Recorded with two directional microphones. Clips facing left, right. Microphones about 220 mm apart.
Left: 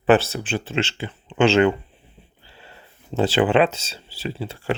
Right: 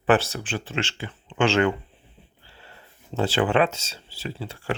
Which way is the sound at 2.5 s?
15° left (ahead or behind).